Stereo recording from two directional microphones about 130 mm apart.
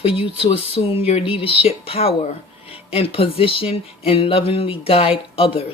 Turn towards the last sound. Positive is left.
turn(degrees=45)  # may be behind; listen again after turning